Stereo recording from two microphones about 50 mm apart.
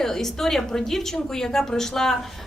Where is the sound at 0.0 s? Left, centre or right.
Centre.